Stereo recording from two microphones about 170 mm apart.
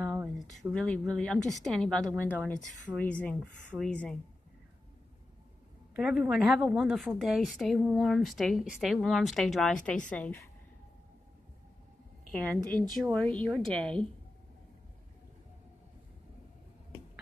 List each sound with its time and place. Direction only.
0.5 s a woman's voice: centre (ahead or behind)
5.9 s a woman's voice: 5° right (ahead or behind)
12.3 s a woman's voice: 5° left (ahead or behind)